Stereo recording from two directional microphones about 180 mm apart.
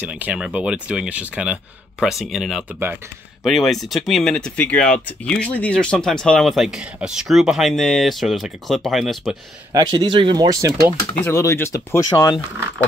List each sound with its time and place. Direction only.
0.0 s speech: 10° right (ahead or behind)
9.7 s speech: 20° right (ahead or behind)
11.2 s speech: 15° left (ahead or behind)